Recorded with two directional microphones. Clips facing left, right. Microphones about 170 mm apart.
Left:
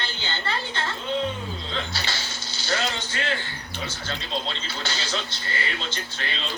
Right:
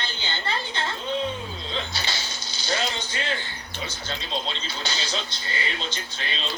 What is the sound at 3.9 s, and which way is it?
Speech, 15° right (ahead or behind).